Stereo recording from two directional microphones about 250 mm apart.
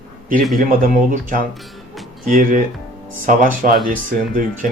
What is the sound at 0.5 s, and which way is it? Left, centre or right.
Speech, right.